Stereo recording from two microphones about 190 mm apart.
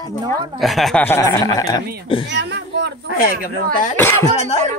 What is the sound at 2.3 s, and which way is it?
Speech, 65° right (ahead or behind).